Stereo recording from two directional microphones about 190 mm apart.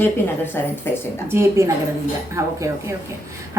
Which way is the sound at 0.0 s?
10° left (ahead or behind).